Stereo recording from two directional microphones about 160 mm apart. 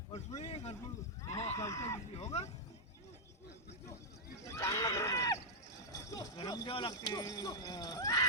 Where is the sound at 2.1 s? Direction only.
40° left (ahead or behind).